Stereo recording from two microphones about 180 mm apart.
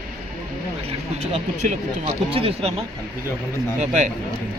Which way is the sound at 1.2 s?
40° right (ahead or behind).